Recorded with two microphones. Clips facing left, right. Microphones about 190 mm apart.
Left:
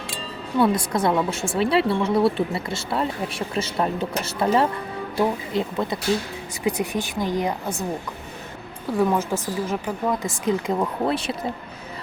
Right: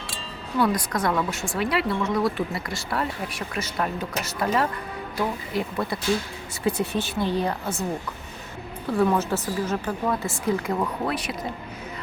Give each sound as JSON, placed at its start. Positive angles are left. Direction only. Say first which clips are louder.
{"t": 0.6, "sound": "speech", "louder": "left 3 dB", "side_deg": 25}
{"t": 8.9, "sound": "speech", "louder": "left 1 dB", "side_deg": 10}